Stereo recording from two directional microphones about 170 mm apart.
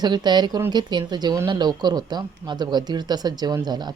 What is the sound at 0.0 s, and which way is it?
Speech, 25° right (ahead or behind).